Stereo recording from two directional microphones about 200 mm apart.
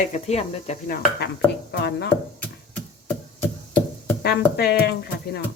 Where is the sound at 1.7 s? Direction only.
55° left (ahead or behind).